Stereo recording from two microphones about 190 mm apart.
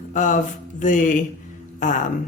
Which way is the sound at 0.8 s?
40° left (ahead or behind).